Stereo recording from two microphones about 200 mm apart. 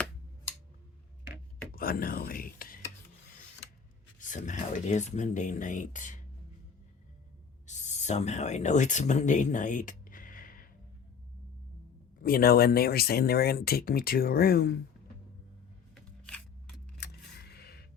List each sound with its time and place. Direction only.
1.7 s a sound: 45° left (ahead or behind)
4.2 s speech: 40° left (ahead or behind)
7.7 s speech: 35° left (ahead or behind)
12.2 s speech: 50° left (ahead or behind)
16.2 s scissors: 5° left (ahead or behind)
17.0 s a sound: 50° left (ahead or behind)